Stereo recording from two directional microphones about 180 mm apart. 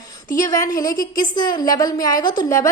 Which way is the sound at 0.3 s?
20° left (ahead or behind).